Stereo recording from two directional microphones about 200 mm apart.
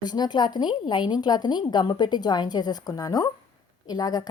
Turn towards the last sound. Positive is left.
turn(degrees=20)  # may be behind; listen again after turning